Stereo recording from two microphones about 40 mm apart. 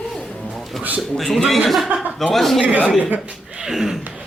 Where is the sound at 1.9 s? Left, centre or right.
Right.